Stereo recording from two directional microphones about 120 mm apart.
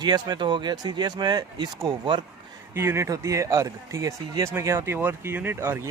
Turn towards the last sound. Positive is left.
turn(degrees=-20)  # may be behind; listen again after turning